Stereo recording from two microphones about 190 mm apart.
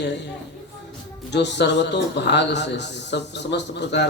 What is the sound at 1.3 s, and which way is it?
Speech, 65° left (ahead or behind).